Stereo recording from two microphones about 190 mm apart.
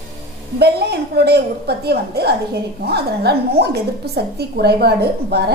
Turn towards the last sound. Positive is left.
turn(degrees=-55)  # may be behind; listen again after turning